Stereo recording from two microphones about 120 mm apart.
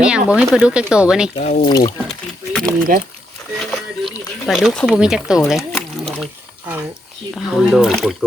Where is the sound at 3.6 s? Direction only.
Centre (ahead or behind).